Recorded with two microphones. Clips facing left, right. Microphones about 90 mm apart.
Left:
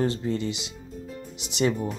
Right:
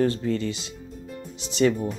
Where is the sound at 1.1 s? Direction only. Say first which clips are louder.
Right 3 dB; centre (ahead or behind).